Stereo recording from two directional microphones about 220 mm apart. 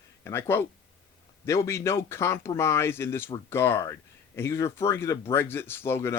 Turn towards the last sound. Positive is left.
turn(degrees=10)  # may be behind; listen again after turning